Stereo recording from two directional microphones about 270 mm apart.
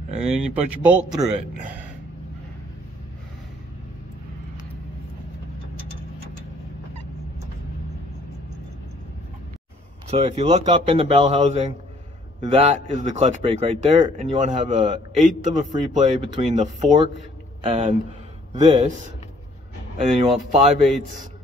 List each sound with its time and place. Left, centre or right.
0.3 s speech: centre
10.0 s speech: right
20.3 s speech: centre